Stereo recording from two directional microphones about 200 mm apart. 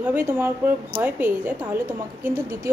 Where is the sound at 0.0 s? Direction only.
5° right (ahead or behind).